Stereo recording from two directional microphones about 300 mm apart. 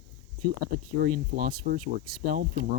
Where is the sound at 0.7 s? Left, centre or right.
Right.